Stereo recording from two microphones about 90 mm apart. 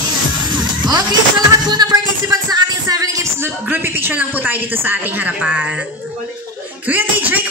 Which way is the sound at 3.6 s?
20° right (ahead or behind).